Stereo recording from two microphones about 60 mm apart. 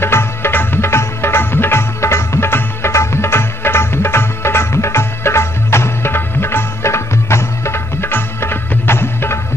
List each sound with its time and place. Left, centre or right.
0.0 s music: left